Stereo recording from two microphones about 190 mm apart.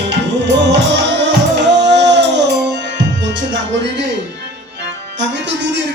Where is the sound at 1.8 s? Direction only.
65° right (ahead or behind).